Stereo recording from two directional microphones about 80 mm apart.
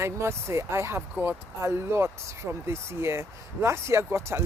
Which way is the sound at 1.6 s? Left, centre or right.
Right.